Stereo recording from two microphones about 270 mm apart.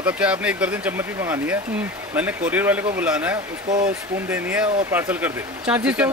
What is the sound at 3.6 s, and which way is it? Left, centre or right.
Speech, right.